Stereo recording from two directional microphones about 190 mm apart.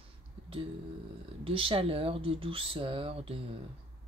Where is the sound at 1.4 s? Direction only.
30° right (ahead or behind).